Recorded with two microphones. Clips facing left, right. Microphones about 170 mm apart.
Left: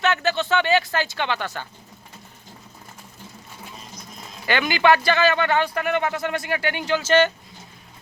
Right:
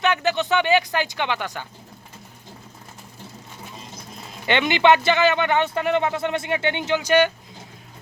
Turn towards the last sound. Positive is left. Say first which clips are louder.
# even
turn(degrees=-15)  # may be behind; listen again after turning